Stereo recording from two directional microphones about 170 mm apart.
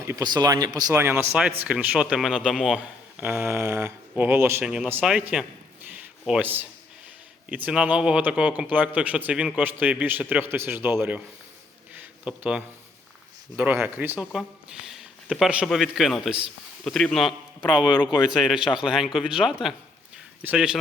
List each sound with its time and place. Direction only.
0.0 s speech: 20° right (ahead or behind); by 2.8 s centre (ahead or behind)
3.2 s speech: 15° right (ahead or behind)
5.9 s a sound: 5° right (ahead or behind)
7.5 s speech: 10° right (ahead or behind)
11.9 s a sound: 10° right (ahead or behind)
13.6 s speech: 10° right (ahead or behind)